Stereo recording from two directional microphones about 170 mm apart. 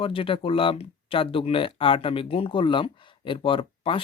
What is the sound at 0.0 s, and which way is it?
Speech, 30° left (ahead or behind).